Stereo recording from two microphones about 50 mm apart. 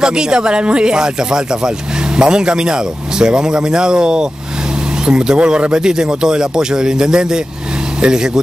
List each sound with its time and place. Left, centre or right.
0.0 s speech: centre